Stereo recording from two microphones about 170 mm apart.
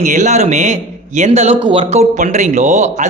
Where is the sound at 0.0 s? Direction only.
45° right (ahead or behind).